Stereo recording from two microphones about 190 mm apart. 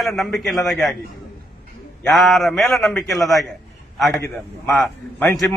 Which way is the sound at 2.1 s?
Centre (ahead or behind).